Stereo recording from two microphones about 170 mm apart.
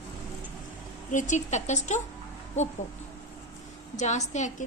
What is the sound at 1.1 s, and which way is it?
Speech, 45° left (ahead or behind).